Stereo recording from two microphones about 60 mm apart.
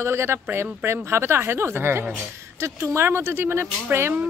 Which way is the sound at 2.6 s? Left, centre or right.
Right.